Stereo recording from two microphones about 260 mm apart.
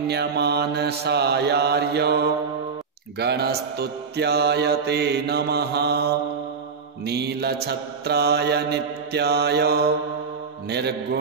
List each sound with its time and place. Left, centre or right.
0.1 s mantra: right
7.1 s mantra: right